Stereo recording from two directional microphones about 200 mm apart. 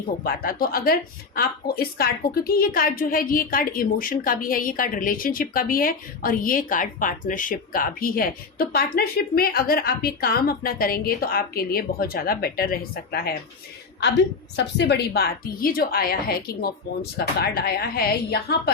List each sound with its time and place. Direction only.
0.3 s a woman's voice: 45° left (ahead or behind)
14.5 s a woman's voice: 55° left (ahead or behind)